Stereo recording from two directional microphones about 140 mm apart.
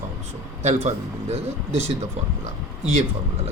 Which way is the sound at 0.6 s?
50° right (ahead or behind).